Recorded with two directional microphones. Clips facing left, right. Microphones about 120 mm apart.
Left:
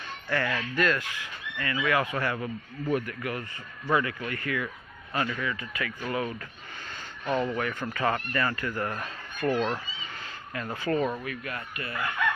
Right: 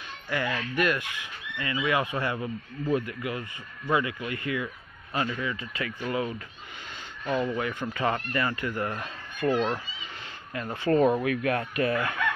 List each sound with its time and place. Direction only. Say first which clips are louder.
0.3 s speech: even; 20° right (ahead or behind)
7.2 s speech: even; 20° left (ahead or behind)
7.5 s speech: right 1 dB; 20° right (ahead or behind)
11.0 s speech: right 9 dB; 40° right (ahead or behind)
11.2 s speech: right 9 dB; 90° right